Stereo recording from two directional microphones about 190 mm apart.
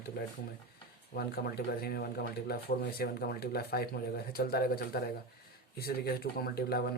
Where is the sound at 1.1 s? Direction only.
55° left (ahead or behind).